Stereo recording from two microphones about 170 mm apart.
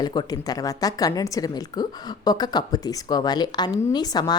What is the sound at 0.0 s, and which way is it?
A woman's voice, 25° left (ahead or behind).